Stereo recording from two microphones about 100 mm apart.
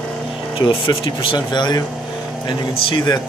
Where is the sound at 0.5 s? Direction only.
60° left (ahead or behind).